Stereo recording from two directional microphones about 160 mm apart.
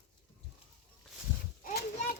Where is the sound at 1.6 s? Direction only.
65° left (ahead or behind).